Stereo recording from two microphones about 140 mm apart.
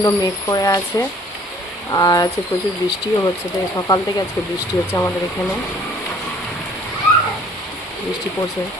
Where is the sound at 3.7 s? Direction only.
25° left (ahead or behind).